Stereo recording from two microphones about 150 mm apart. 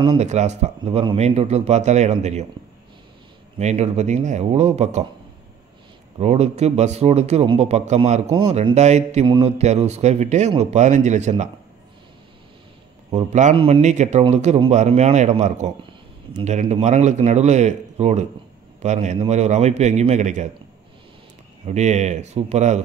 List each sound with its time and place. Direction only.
0.2 s a man's voice: 50° right (ahead or behind)
3.5 s a man's voice: 45° right (ahead or behind)
6.1 s a man's voice: 45° right (ahead or behind)
13.1 s a man's voice: 50° right (ahead or behind)
21.6 s a man's voice: 50° right (ahead or behind)